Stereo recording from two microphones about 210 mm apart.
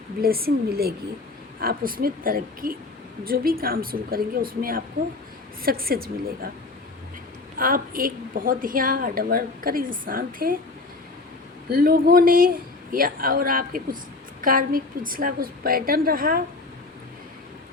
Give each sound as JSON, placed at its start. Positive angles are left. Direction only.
{"t": 0.2, "sound": "a woman's voice", "side_deg": -45}
{"t": 7.6, "sound": "a woman's voice", "side_deg": -40}
{"t": 11.7, "sound": "a woman's voice", "side_deg": -45}